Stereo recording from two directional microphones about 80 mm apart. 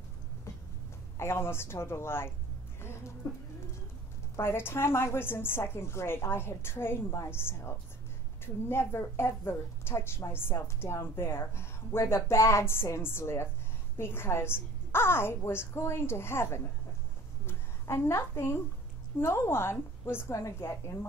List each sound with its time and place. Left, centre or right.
1.1 s a woman's voice: left
2.8 s music: left
4.4 s a woman's voice: left